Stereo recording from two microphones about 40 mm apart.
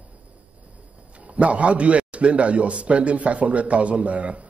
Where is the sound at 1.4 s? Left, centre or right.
Right.